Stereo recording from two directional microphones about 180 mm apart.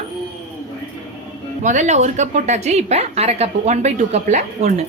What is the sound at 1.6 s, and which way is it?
A woman's voice, 40° right (ahead or behind).